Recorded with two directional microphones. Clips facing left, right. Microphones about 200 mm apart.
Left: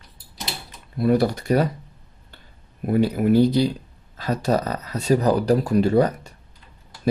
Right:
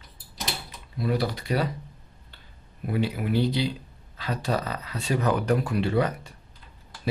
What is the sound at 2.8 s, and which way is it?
Speech, 45° left (ahead or behind).